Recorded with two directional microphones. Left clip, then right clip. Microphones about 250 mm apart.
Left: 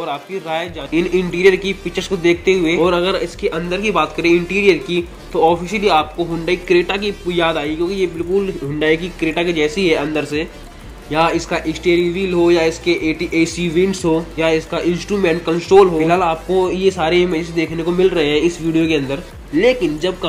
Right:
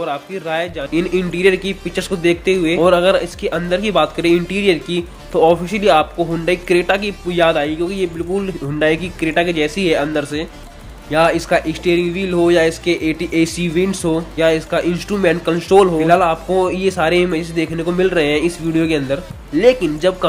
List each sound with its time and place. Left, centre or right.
0.0 s a man's voice: right